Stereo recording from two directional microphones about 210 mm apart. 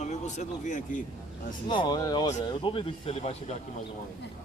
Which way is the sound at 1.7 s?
20° left (ahead or behind).